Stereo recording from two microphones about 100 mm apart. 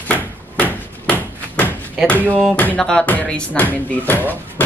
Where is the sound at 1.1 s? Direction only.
20° left (ahead or behind).